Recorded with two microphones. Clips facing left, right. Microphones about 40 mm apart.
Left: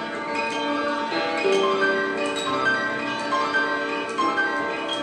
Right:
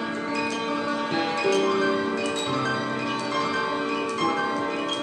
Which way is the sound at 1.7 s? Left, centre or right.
Centre.